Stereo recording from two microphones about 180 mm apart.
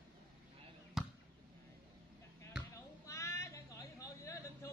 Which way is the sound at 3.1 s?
15° left (ahead or behind).